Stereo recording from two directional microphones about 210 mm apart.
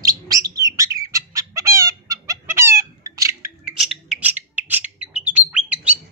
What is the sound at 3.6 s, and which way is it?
Bird, 5° right (ahead or behind).